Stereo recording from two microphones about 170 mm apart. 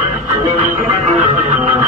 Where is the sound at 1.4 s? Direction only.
45° right (ahead or behind).